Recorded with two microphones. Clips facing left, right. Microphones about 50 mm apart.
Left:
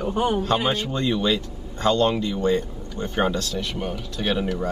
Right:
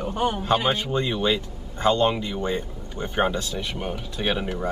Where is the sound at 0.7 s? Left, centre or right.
Centre.